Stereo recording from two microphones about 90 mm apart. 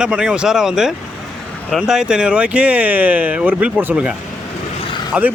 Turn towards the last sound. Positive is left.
turn(degrees=-15)  # may be behind; listen again after turning